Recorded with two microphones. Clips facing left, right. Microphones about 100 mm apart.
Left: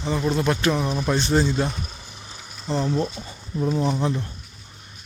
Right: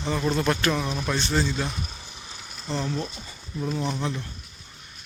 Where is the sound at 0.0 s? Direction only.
5° left (ahead or behind).